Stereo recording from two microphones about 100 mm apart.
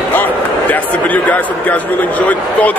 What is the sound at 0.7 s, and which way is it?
A man's voice, 15° left (ahead or behind).